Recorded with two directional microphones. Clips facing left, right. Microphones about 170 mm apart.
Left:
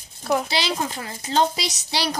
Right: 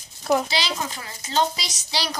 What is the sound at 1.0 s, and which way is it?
Speech, 30° left (ahead or behind).